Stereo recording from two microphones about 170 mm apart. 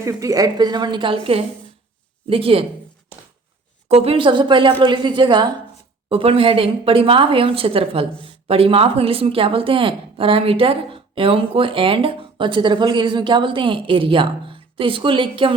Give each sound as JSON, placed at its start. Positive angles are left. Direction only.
{"t": 0.0, "sound": "a woman's voice", "side_deg": -20}
{"t": 3.8, "sound": "a woman's voice", "side_deg": -35}